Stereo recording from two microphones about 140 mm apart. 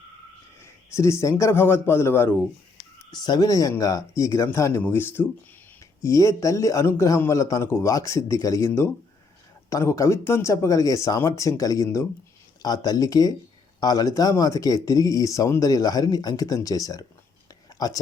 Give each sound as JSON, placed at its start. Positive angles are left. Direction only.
{"t": 0.6, "sound": "a man's voice", "side_deg": 20}
{"t": 3.1, "sound": "a man's voice", "side_deg": 30}